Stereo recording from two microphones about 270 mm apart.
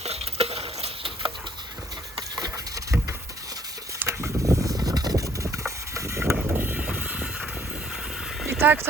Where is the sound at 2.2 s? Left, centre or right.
Centre.